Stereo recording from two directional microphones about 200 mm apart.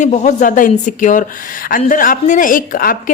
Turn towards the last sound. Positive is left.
turn(degrees=45)  # may be behind; listen again after turning